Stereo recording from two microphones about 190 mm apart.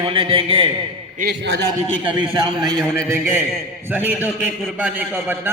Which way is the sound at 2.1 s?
25° right (ahead or behind).